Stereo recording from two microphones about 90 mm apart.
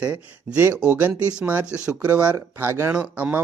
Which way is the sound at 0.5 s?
30° right (ahead or behind).